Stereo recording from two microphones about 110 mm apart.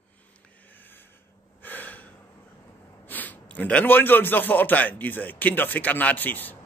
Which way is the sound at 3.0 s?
15° left (ahead or behind).